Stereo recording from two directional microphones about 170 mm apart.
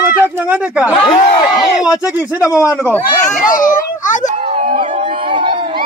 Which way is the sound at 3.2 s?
50° left (ahead or behind).